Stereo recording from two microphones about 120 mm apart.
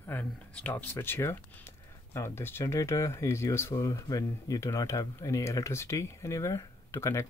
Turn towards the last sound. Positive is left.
turn(degrees=25)  # may be behind; listen again after turning